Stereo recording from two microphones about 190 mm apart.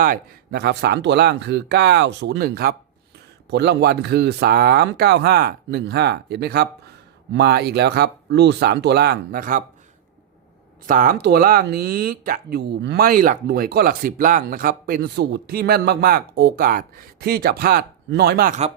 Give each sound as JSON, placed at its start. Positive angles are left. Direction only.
{"t": 0.0, "sound": "speech", "side_deg": -50}
{"t": 10.8, "sound": "speech", "side_deg": -45}